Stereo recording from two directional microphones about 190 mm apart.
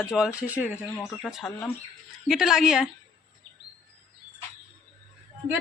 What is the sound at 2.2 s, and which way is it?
Speech, centre (ahead or behind).